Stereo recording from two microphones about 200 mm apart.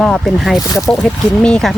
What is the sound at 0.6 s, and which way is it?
Speech, 20° left (ahead or behind).